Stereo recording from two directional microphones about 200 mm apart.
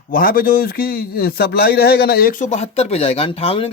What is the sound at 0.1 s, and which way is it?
A man's voice, 45° left (ahead or behind).